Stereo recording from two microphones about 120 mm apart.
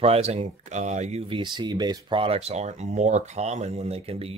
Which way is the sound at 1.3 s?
40° right (ahead or behind).